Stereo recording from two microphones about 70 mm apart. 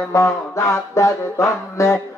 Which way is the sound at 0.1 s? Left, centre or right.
Left.